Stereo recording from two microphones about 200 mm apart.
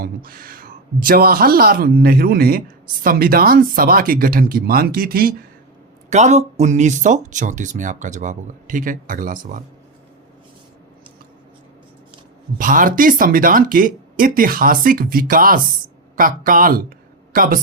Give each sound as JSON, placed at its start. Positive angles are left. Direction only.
{"t": 0.0, "sound": "speech", "side_deg": -45}
{"t": 6.1, "sound": "speech", "side_deg": -35}
{"t": 12.5, "sound": "speech", "side_deg": -45}